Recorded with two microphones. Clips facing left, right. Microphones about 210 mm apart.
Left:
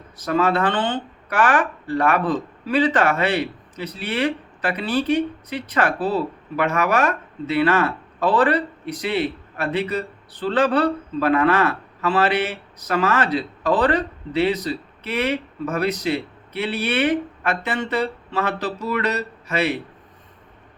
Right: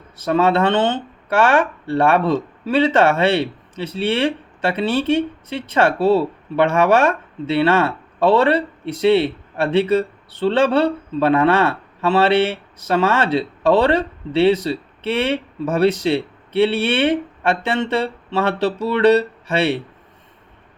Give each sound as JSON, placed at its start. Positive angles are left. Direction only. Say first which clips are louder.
{"t": 0.2, "sound": "speech", "louder": "right 4 dB", "side_deg": -25}